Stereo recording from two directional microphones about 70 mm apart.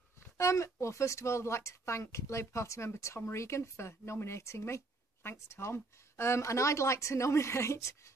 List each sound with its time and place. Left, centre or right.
0.4 s speech: left